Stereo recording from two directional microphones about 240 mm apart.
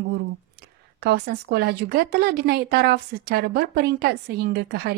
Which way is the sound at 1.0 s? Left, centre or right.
Right.